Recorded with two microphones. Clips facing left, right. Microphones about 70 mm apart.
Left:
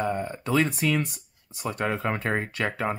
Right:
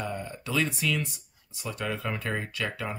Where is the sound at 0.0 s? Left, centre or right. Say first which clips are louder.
Left 6 dB; left.